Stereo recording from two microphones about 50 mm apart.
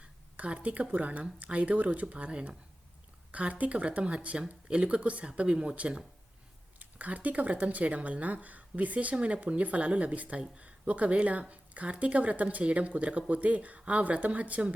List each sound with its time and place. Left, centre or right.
0.0 s speech: right